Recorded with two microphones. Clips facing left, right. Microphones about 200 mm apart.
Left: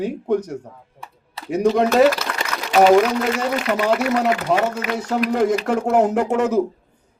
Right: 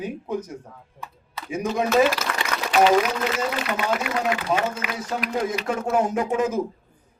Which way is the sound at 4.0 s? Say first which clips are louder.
Left 6 dB; 70° left (ahead or behind).